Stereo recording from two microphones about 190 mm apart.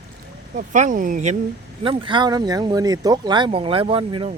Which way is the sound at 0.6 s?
40° right (ahead or behind).